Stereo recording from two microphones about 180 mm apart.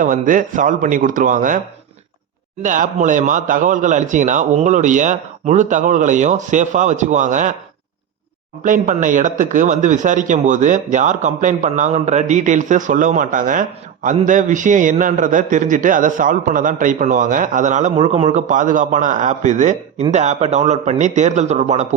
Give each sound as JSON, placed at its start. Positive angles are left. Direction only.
{"t": 0.0, "sound": "a man's voice", "side_deg": -45}
{"t": 2.6, "sound": "a man's voice", "side_deg": -45}
{"t": 8.6, "sound": "a man's voice", "side_deg": -45}